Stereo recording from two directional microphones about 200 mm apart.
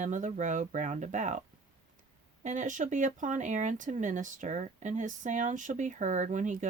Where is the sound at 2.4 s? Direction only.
40° right (ahead or behind).